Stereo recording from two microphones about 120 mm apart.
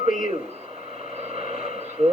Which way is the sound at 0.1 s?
90° left.